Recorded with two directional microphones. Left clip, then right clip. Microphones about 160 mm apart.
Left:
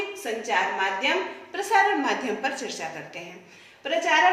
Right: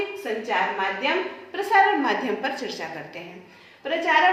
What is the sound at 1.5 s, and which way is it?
A woman's voice, 20° right (ahead or behind).